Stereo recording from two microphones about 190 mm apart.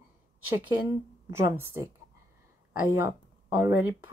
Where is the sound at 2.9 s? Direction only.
10° right (ahead or behind).